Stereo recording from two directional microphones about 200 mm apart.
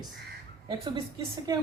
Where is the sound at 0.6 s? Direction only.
25° right (ahead or behind).